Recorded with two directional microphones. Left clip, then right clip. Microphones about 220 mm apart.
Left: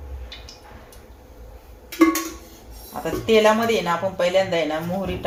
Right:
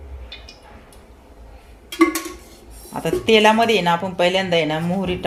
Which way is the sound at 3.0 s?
50° right (ahead or behind).